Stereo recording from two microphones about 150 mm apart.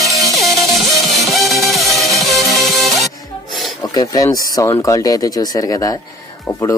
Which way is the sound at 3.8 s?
25° left (ahead or behind).